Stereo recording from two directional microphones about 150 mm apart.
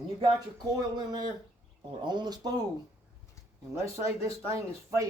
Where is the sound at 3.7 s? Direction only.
20° right (ahead or behind).